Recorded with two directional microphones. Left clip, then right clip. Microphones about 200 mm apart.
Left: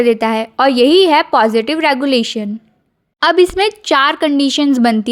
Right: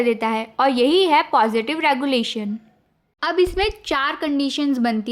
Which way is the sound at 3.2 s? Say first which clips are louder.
Left 8 dB; 40° left (ahead or behind).